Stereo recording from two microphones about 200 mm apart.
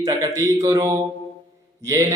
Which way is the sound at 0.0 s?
15° right (ahead or behind).